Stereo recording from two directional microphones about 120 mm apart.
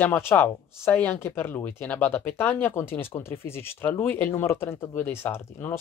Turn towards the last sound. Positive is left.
turn(degrees=20)  # may be behind; listen again after turning